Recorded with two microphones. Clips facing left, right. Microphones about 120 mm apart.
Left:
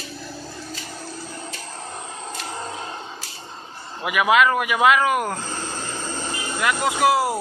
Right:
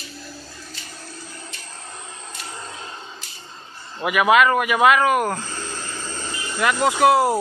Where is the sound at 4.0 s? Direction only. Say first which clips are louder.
Right 2 dB; 15° left (ahead or behind).